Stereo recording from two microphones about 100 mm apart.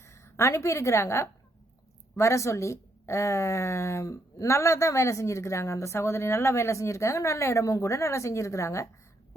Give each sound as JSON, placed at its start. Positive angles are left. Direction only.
{"t": 0.0, "sound": "a woman's voice", "side_deg": 30}